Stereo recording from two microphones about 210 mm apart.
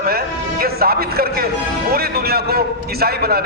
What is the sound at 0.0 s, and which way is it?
Music, 45° right (ahead or behind).